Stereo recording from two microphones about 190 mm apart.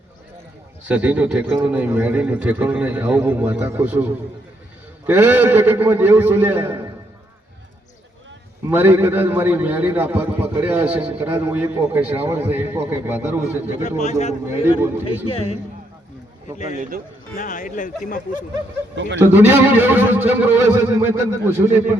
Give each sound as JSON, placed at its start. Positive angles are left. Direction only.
{"t": 0.9, "sound": "a man's voice", "side_deg": -5}
{"t": 8.7, "sound": "a man's voice", "side_deg": -10}
{"t": 13.7, "sound": "speech", "side_deg": 40}
{"t": 17.3, "sound": "speech", "side_deg": 45}
{"t": 19.2, "sound": "a man's voice", "side_deg": -10}